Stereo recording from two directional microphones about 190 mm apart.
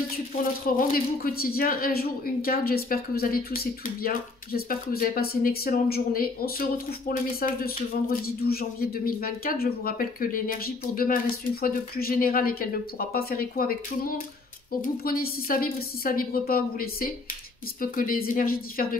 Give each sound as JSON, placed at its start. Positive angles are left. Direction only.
{"t": 0.7, "sound": "speech", "side_deg": 50}